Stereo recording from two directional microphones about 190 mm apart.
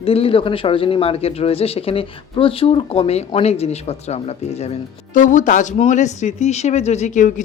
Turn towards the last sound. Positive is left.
turn(degrees=40)  # may be behind; listen again after turning